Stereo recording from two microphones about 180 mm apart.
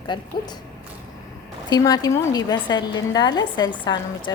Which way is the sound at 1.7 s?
20° left (ahead or behind).